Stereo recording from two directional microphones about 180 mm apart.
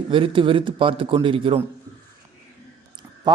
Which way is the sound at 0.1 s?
30° right (ahead or behind).